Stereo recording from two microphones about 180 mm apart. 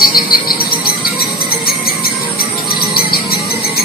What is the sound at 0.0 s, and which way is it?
Cricket, 55° left (ahead or behind).